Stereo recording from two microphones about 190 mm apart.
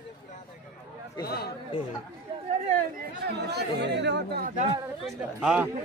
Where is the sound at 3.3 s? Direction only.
60° right (ahead or behind).